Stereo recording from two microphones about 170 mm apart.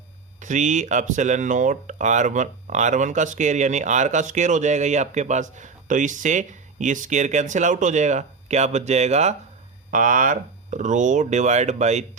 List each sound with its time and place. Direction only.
0.3 s speech: 45° right (ahead or behind)
9.9 s speech: 50° right (ahead or behind)